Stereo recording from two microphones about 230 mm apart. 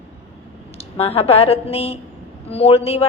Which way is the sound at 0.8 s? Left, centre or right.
Left.